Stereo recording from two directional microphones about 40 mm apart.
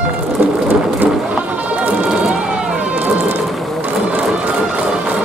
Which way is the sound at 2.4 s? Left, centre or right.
Right.